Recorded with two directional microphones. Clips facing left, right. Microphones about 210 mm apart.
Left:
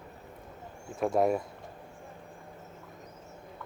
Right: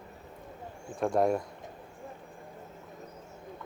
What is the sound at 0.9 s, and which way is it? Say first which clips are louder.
Speech: even; centre (ahead or behind).